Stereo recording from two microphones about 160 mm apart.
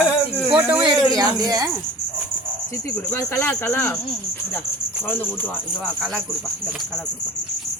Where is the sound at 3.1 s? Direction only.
15° left (ahead or behind).